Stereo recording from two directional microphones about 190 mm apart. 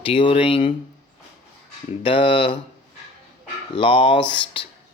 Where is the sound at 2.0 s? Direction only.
30° left (ahead or behind).